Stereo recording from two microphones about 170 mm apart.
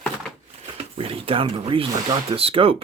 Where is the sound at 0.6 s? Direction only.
35° right (ahead or behind).